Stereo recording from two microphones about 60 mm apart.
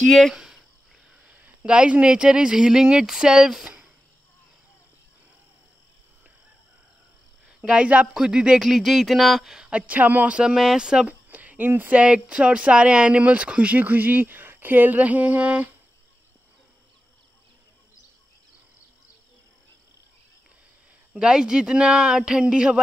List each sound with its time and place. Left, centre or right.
0.0 s speech: centre
0.3 s cricket: centre
1.3 s speech: right; by 3.6 s centre
3.6 s cricket: centre
7.4 s a woman's voice: centre
8.6 s speech: centre
9.7 s speech: right
10.3 s speech: centre
11.1 s a sound: right
11.9 s speech: centre
21.1 s speech: centre